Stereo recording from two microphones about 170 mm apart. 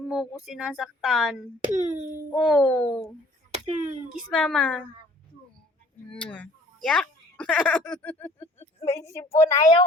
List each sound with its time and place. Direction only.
0.1 s speech: centre (ahead or behind)
1.7 s speech: 45° right (ahead or behind)
2.4 s speech: 5° left (ahead or behind)
3.5 s a sound: 45° right (ahead or behind)
4.3 s speech: centre (ahead or behind)
6.1 s speech: 5° left (ahead or behind)